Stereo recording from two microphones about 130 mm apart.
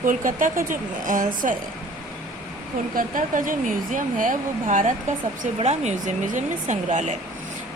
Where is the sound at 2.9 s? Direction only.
90° right.